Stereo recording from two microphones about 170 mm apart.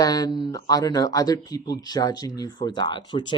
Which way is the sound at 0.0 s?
20° left (ahead or behind).